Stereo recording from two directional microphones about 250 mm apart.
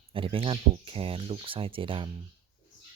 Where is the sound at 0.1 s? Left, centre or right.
Right.